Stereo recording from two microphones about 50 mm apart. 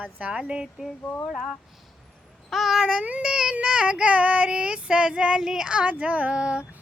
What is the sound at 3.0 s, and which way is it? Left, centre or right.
Child singing, right.